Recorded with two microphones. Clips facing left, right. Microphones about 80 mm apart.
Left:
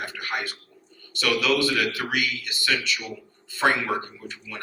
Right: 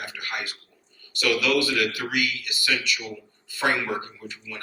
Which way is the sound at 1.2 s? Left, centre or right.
Left.